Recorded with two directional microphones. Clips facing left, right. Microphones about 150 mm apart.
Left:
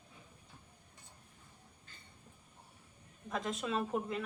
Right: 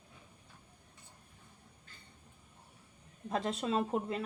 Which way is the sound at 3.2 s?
30° right (ahead or behind).